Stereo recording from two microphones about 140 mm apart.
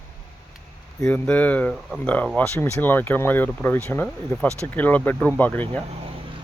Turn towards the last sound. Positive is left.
turn(degrees=10)  # may be behind; listen again after turning